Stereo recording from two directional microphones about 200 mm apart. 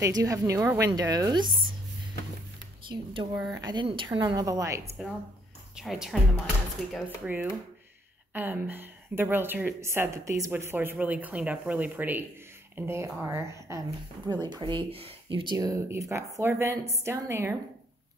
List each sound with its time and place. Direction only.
0.0 s speech: 15° right (ahead or behind)
2.9 s a woman's voice: 25° right (ahead or behind)
5.8 s a woman's voice: centre (ahead or behind)